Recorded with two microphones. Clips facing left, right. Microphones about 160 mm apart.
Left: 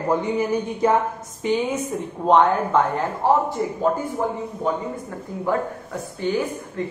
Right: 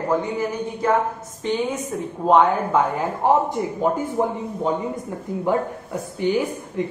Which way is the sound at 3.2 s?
15° right (ahead or behind).